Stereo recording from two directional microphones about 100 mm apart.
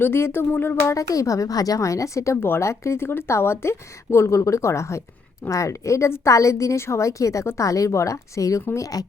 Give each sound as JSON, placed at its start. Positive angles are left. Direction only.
{"t": 0.0, "sound": "speech", "side_deg": 25}
{"t": 0.9, "sound": "a woman's voice", "side_deg": 35}